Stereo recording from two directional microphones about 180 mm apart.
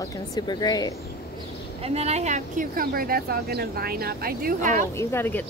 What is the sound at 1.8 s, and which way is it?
A woman's voice, 35° right (ahead or behind).